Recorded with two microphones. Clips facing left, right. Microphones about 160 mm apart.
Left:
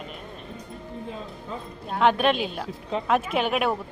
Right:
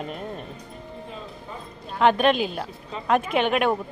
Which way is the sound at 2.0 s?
Centre (ahead or behind).